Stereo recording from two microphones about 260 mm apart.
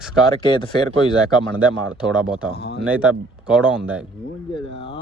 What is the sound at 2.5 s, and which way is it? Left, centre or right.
Speech, left.